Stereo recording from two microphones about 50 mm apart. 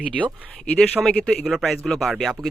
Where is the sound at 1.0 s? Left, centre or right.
Right.